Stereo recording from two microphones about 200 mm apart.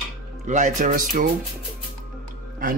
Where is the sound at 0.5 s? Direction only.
40° right (ahead or behind).